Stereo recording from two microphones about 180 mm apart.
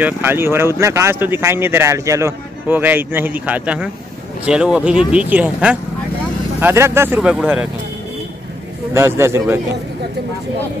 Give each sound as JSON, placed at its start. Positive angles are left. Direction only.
{"t": 0.0, "sound": "speech", "side_deg": -10}
{"t": 8.9, "sound": "speech", "side_deg": -15}